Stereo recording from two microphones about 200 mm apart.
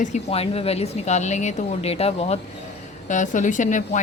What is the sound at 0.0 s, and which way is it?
A woman's voice, 35° left (ahead or behind).